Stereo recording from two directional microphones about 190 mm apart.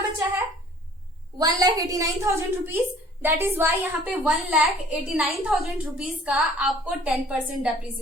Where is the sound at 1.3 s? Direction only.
20° right (ahead or behind); by 7.6 s 5° right (ahead or behind).